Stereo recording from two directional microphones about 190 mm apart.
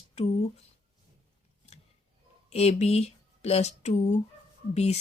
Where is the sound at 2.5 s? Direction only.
35° left (ahead or behind).